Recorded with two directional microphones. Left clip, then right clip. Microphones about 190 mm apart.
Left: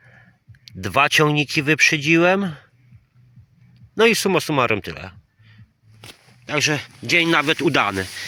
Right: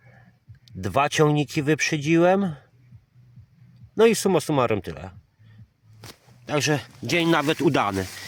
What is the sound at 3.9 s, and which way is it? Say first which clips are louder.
Speech: left 2 dB; 10° right (ahead or behind).